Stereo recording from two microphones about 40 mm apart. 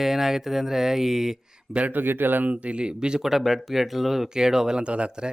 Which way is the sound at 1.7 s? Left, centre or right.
Right.